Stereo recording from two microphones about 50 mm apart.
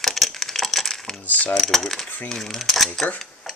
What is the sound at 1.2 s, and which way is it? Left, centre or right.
Mechanisms, left.